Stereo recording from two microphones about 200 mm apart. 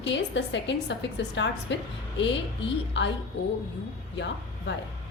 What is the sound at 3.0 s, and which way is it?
Speech, 60° left (ahead or behind).